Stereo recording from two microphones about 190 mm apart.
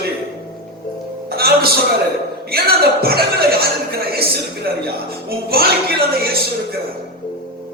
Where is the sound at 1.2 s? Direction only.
55° right (ahead or behind).